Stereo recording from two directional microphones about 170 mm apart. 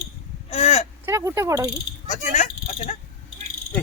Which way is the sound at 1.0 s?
15° right (ahead or behind).